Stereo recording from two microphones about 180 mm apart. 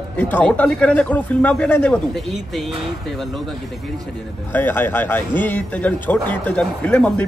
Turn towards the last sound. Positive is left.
turn(degrees=5)  # may be behind; listen again after turning